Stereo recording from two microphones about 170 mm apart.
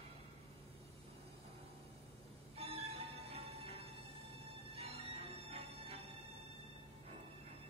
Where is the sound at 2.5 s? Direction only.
35° right (ahead or behind).